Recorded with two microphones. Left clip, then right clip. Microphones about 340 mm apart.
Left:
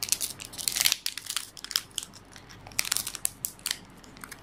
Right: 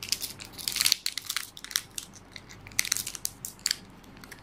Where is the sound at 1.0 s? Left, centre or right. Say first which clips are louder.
Right 1 dB; centre.